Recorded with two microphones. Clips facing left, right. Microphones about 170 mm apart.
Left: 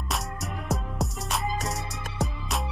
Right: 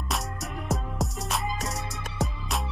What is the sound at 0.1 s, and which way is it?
Music, centre (ahead or behind).